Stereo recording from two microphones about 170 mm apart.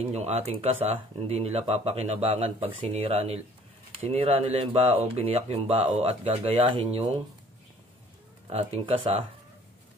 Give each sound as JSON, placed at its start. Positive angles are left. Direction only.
{"t": 0.0, "sound": "speech", "side_deg": -40}
{"t": 8.5, "sound": "speech", "side_deg": -35}